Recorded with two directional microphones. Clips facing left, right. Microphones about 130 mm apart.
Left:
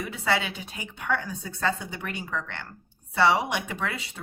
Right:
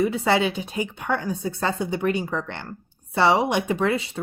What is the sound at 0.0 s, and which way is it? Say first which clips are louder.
A woman's voice: right 7 dB; 30° right (ahead or behind).